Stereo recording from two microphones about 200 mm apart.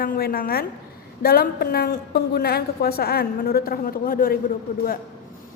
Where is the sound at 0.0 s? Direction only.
50° left (ahead or behind).